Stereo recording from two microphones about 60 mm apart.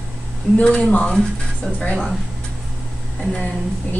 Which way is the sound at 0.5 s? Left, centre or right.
Centre.